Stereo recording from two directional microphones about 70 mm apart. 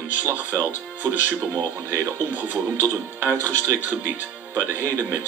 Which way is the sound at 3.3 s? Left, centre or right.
Left.